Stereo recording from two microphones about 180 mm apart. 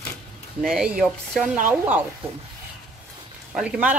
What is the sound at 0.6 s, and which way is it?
Speech, centre (ahead or behind).